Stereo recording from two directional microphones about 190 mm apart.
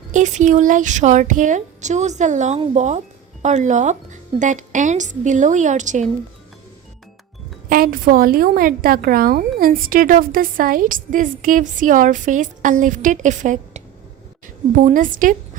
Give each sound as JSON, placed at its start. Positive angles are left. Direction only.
{"t": 0.1, "sound": "a woman's voice", "side_deg": -40}
{"t": 7.7, "sound": "a woman's voice", "side_deg": -50}